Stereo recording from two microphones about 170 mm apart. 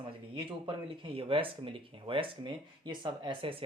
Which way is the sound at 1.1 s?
30° right (ahead or behind).